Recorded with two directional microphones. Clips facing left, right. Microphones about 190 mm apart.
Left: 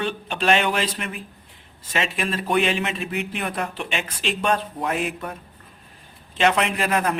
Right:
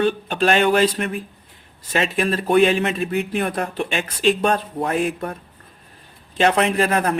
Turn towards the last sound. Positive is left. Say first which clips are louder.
# right 4 dB
turn(degrees=-40)  # may be behind; listen again after turning